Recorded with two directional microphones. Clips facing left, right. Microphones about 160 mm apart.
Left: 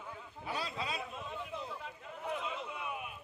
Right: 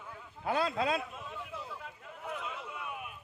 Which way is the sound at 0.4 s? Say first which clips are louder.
Right 9 dB; 55° right (ahead or behind).